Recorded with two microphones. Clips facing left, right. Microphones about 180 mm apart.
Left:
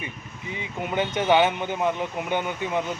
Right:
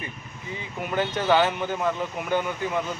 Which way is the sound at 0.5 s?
20° left (ahead or behind).